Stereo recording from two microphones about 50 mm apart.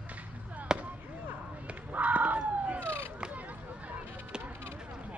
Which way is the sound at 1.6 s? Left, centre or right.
Right.